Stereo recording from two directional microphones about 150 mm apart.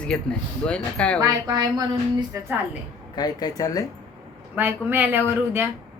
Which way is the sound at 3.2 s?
25° left (ahead or behind).